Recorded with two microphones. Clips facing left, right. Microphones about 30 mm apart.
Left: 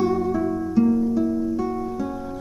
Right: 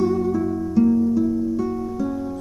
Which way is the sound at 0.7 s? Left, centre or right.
Centre.